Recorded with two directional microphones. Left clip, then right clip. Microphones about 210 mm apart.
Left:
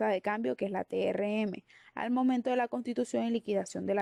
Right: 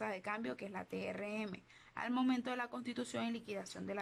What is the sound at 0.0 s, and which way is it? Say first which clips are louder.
Speech: left 11 dB; 35° left (ahead or behind).